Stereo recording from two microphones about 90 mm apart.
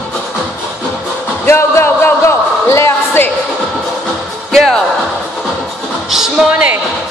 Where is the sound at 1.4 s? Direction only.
30° left (ahead or behind).